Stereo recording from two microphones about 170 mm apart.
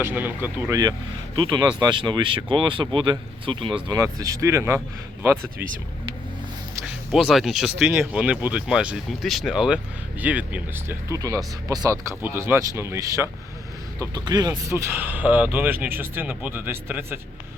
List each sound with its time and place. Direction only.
0.0 s speech: 10° right (ahead or behind)
1.4 s speech: 25° right (ahead or behind)
6.8 s speech: 5° right (ahead or behind)